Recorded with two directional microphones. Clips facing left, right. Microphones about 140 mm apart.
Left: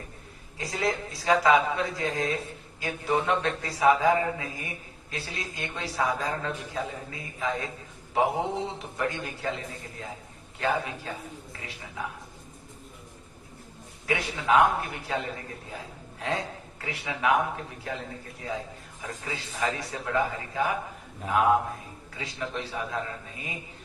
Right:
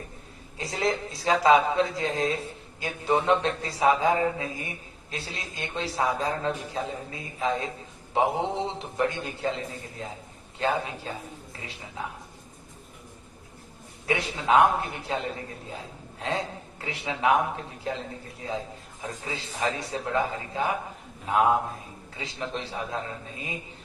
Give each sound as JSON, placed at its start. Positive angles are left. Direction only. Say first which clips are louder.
{"t": 0.6, "sound": "a man's voice", "louder": "right 1 dB", "side_deg": -25}
{"t": 14.1, "sound": "a man's voice", "louder": "right 1 dB", "side_deg": -25}
{"t": 16.8, "sound": "a man's voice", "louder": "right 2 dB", "side_deg": -30}
{"t": 19.2, "sound": "a man's voice", "louder": "right 1 dB", "side_deg": -25}